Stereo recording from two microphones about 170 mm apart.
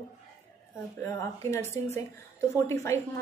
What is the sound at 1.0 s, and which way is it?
A woman's voice, 15° left (ahead or behind).